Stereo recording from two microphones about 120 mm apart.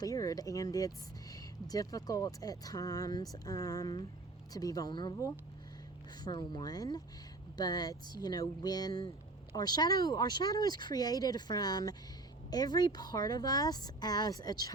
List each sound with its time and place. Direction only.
0.0 s speech: 30° left (ahead or behind)
6.2 s speech: 35° left (ahead or behind)